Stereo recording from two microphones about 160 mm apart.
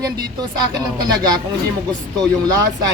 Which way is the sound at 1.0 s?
25° right (ahead or behind).